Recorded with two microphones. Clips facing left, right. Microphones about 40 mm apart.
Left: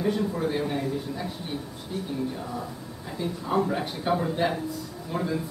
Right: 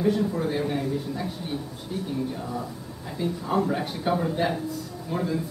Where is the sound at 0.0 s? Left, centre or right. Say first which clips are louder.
Right 2 dB; centre.